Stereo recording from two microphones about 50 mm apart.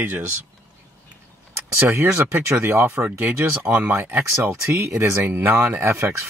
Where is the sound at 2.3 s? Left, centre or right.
Right.